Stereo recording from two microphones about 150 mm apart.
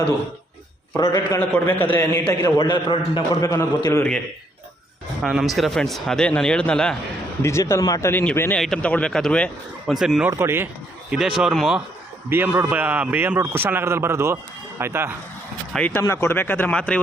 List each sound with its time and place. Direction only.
0.9 s speech: 20° left (ahead or behind)
2.4 s a man's voice: 30° left (ahead or behind)
5.2 s a man's voice: centre (ahead or behind)
7.4 s a man's voice: 20° left (ahead or behind); by 10.2 s centre (ahead or behind)
10.2 s a man's voice: 15° right (ahead or behind)
11.1 s a man's voice: 5° right (ahead or behind)
12.3 s a man's voice: 15° right (ahead or behind)
15.7 s speech: 10° left (ahead or behind)